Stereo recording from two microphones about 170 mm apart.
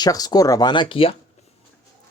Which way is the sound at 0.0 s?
25° left (ahead or behind).